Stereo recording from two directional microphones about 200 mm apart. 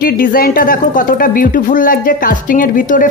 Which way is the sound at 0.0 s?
45° left (ahead or behind).